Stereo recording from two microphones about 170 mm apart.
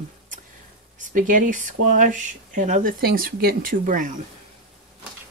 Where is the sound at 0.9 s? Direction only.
50° right (ahead or behind).